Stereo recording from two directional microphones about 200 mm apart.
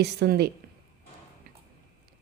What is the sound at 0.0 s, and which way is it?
Speech, 55° right (ahead or behind).